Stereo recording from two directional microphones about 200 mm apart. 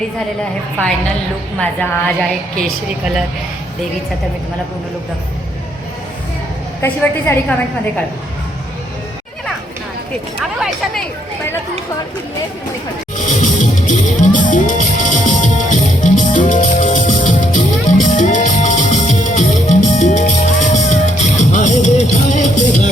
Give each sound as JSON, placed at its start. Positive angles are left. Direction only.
{"t": 1.5, "sound": "a woman's voice", "side_deg": 5}
{"t": 6.8, "sound": "a woman's voice", "side_deg": 10}
{"t": 10.4, "sound": "a woman's voice", "side_deg": 0}
{"t": 13.1, "sound": "music", "side_deg": 40}